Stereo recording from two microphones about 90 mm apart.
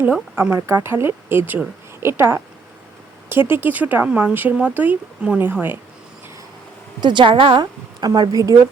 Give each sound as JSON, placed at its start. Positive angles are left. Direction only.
{"t": 0.0, "sound": "speech", "side_deg": -15}
{"t": 0.7, "sound": "a woman's voice", "side_deg": -30}
{"t": 3.5, "sound": "speech", "side_deg": -20}
{"t": 7.0, "sound": "a woman's voice", "side_deg": -60}